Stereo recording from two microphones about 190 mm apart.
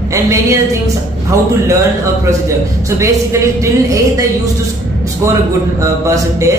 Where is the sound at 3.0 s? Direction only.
15° right (ahead or behind).